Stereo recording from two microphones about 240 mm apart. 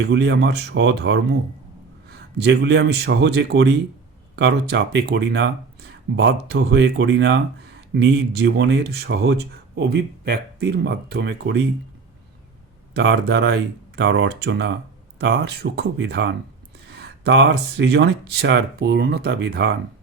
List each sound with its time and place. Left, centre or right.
0.1 s speech: right
12.9 s speech: right